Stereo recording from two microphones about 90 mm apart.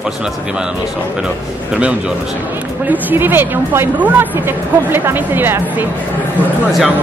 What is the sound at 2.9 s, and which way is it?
Speech, 20° right (ahead or behind).